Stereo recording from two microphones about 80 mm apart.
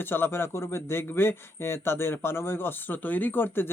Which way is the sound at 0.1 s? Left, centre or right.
Left.